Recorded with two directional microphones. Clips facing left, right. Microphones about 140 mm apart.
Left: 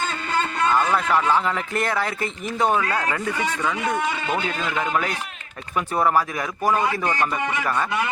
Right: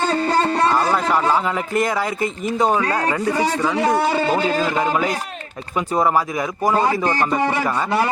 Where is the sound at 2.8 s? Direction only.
35° right (ahead or behind).